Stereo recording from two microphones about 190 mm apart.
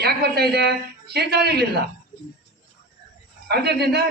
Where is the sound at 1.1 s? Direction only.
60° right (ahead or behind).